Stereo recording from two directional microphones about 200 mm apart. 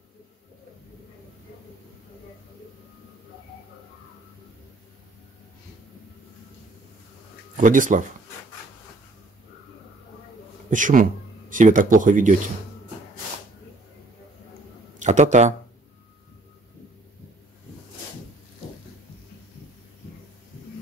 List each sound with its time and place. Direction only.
7.5 s speech: 40° right (ahead or behind)
10.7 s speech: 40° right (ahead or behind)
15.0 s speech: 35° right (ahead or behind)